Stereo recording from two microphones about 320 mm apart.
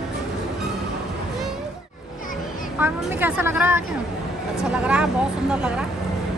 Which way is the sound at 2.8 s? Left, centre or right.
Centre.